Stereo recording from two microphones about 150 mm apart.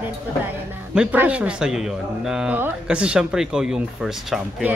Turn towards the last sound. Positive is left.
turn(degrees=-5)  # may be behind; listen again after turning